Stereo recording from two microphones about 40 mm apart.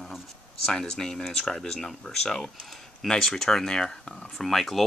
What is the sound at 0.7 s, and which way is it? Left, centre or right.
Speech, centre.